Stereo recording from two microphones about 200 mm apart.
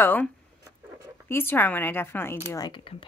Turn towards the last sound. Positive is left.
turn(degrees=25)  # may be behind; listen again after turning